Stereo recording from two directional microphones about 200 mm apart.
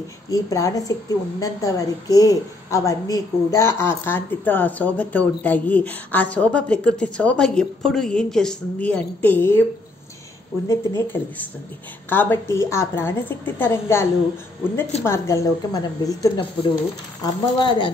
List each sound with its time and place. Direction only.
0.3 s a woman's voice: 15° left (ahead or behind)
10.7 s a woman's voice: 15° left (ahead or behind)
15.0 s a woman's voice: 15° left (ahead or behind)